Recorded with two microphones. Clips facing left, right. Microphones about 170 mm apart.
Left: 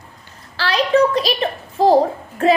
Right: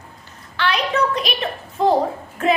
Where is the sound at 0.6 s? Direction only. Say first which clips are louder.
Left 5 dB; 35° left (ahead or behind).